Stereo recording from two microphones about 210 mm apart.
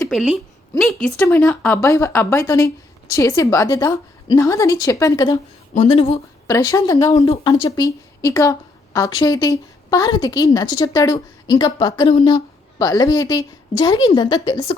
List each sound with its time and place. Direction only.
0.1 s a woman's voice: centre (ahead or behind); by 5.4 s 15° left (ahead or behind)
5.7 s a woman's voice: 30° left (ahead or behind)
6.5 s a woman's voice: 15° left (ahead or behind)
7.1 s a woman's voice: 30° left (ahead or behind)
7.8 s a woman's voice: 15° left (ahead or behind)